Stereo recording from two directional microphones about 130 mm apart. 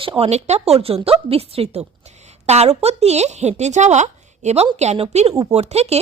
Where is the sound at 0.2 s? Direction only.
60° right (ahead or behind).